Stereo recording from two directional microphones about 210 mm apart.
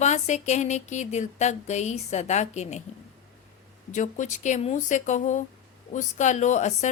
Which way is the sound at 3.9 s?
35° left (ahead or behind).